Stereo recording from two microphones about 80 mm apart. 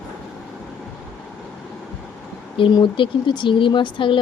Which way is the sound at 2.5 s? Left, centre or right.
Left.